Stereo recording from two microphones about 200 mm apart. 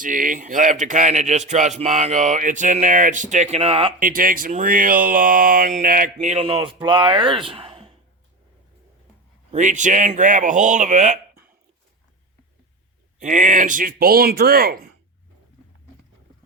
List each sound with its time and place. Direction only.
0.0 s speech: 40° right (ahead or behind)
4.0 s speech: 45° right (ahead or behind); by 7.9 s 25° right (ahead or behind)
9.5 s speech: 35° right (ahead or behind)
13.1 s speech: 40° right (ahead or behind)